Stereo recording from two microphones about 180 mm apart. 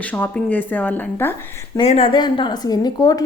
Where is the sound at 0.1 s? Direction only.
10° left (ahead or behind).